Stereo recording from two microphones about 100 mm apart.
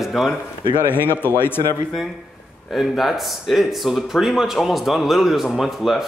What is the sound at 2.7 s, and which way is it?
Speech, centre (ahead or behind).